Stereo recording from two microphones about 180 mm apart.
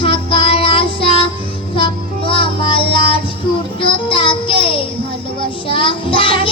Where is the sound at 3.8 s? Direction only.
30° left (ahead or behind).